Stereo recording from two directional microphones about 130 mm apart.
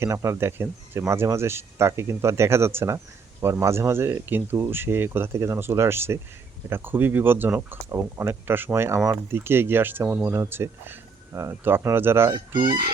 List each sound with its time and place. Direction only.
0.0 s speech: 20° right (ahead or behind)
12.3 s speech: 35° right (ahead or behind)